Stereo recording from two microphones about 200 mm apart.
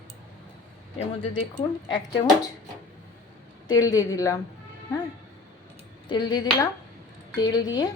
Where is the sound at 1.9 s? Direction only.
20° left (ahead or behind).